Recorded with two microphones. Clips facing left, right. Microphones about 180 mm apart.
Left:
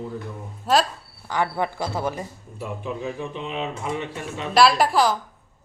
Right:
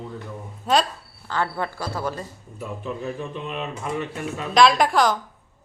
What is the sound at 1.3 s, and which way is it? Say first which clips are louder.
Speech: left 2 dB; 15° left (ahead or behind).